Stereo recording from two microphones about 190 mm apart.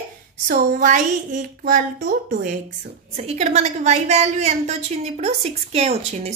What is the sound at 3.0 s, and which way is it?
A woman's voice, 35° right (ahead or behind).